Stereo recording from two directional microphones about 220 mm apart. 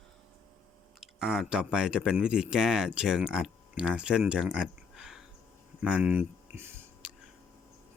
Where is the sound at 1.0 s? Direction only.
5° right (ahead or behind).